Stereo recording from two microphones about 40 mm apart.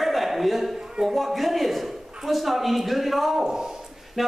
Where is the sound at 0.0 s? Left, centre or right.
Centre.